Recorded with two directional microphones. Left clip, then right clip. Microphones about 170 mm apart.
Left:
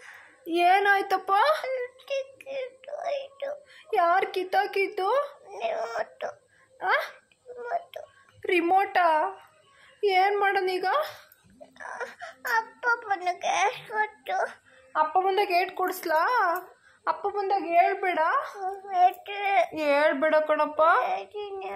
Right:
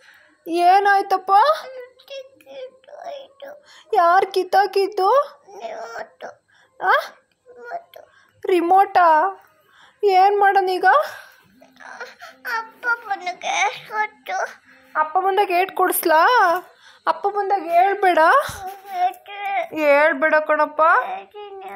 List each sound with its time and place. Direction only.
0.5 s a woman's voice: 30° right (ahead or behind)
1.7 s a sound: 25° left (ahead or behind)
3.7 s a woman's voice: 30° right (ahead or behind)
5.5 s child singing: 20° left (ahead or behind)
6.8 s a woman's voice: 25° right (ahead or behind)
7.5 s a sound: 20° left (ahead or behind)
8.4 s a woman's voice: 25° right (ahead or behind)
11.8 s a child's voice: 25° left (ahead or behind)
14.9 s a woman's voice: 30° right (ahead or behind)
17.7 s speech: 55° right (ahead or behind)
18.9 s child singing: 25° left (ahead or behind)
19.7 s a woman's voice: 40° right (ahead or behind)
21.0 s child singing: 30° left (ahead or behind)